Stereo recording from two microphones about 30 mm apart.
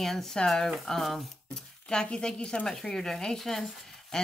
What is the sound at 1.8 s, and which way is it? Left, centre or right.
Speech, left.